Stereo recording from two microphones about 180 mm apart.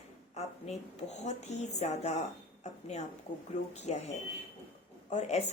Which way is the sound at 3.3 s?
45° left (ahead or behind).